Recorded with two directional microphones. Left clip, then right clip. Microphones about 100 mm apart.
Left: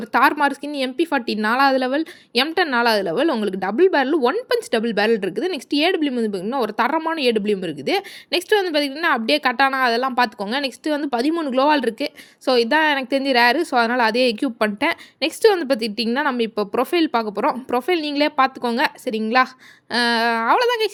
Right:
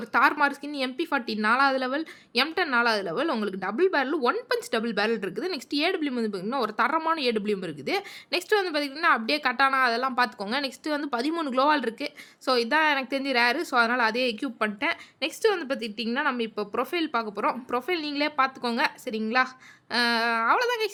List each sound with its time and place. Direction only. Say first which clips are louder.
0.0 s a woman's voice: left 5 dB; 40° left (ahead or behind); by 16.0 s 60° left (ahead or behind)
16.4 s a woman's voice: left 8 dB; 45° left (ahead or behind)